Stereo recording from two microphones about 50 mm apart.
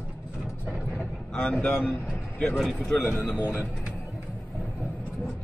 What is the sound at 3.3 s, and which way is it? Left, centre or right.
Speech, right.